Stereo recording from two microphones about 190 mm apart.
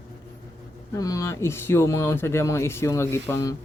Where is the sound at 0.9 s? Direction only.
15° left (ahead or behind).